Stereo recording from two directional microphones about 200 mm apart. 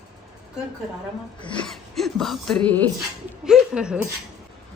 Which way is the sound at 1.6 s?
Centre (ahead or behind).